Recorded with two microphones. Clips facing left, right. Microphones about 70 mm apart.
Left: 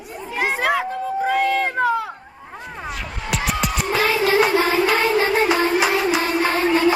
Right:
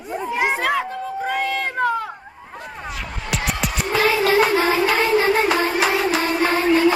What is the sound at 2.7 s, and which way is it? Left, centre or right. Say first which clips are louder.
Music: left 1 dB; centre.